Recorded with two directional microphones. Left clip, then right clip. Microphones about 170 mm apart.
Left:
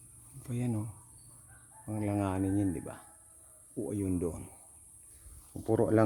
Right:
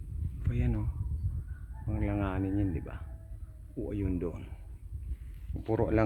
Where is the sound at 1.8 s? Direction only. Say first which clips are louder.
Left 1 dB; 20° left (ahead or behind).